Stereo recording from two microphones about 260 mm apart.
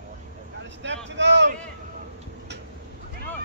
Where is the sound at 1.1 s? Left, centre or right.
Right.